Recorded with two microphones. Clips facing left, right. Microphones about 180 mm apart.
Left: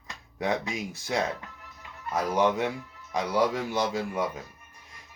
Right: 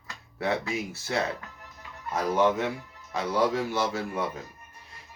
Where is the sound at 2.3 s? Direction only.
15° left (ahead or behind).